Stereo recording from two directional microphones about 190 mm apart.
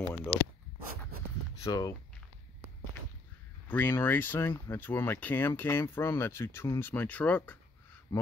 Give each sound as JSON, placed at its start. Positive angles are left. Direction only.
{"t": 0.0, "sound": "speech", "side_deg": 10}
{"t": 1.6, "sound": "speech", "side_deg": 20}
{"t": 3.6, "sound": "speech", "side_deg": 10}